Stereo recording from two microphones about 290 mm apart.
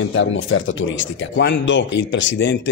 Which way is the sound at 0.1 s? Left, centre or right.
Left.